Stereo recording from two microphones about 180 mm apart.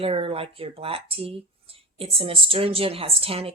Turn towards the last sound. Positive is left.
turn(degrees=-30)  # may be behind; listen again after turning